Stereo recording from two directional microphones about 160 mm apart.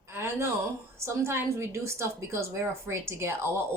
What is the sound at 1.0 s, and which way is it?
Speech, 15° right (ahead or behind).